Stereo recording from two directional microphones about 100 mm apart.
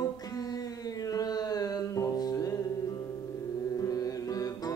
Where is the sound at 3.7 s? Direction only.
35° left (ahead or behind).